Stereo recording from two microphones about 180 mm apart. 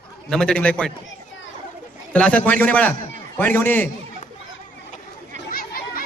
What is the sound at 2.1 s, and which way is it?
A man's voice, 5° left (ahead or behind).